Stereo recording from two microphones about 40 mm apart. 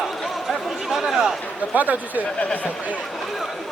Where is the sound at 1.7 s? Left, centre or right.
Right.